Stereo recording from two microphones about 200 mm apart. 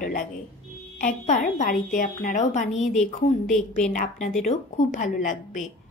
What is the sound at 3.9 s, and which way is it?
A woman's voice, 40° left (ahead or behind).